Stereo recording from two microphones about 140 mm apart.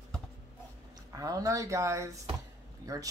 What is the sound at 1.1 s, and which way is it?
Speech, 25° right (ahead or behind).